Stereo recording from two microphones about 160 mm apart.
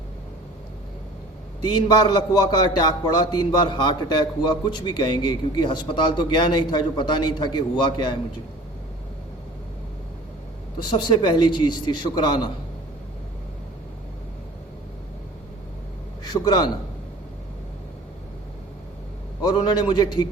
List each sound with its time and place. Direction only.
1.6 s a man's voice: 25° left (ahead or behind)
10.8 s a man's voice: 30° left (ahead or behind)
16.2 s a man's voice: 25° left (ahead or behind)
19.4 s a man's voice: 25° left (ahead or behind)